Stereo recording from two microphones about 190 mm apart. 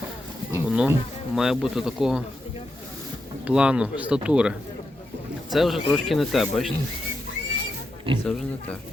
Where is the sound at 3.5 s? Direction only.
5° right (ahead or behind).